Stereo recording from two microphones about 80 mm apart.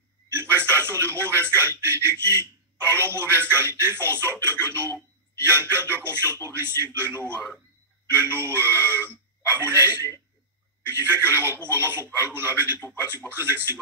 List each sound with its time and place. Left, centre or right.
0.3 s speech: right